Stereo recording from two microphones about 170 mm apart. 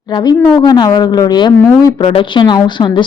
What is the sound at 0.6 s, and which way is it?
A woman's voice, 25° left (ahead or behind).